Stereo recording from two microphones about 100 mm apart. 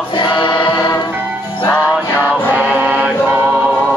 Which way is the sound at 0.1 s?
55° left (ahead or behind).